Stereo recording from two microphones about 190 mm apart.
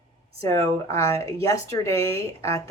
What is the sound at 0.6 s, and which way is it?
Speech, 15° left (ahead or behind).